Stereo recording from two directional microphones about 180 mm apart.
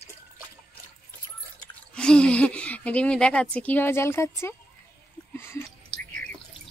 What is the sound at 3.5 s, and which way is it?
Speech, 10° left (ahead or behind).